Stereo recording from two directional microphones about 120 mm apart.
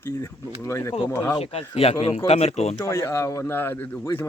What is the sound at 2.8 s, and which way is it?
Speech, 25° left (ahead or behind).